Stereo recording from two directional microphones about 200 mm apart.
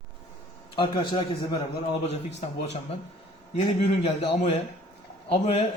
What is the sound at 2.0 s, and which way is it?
Mantra, 35° left (ahead or behind).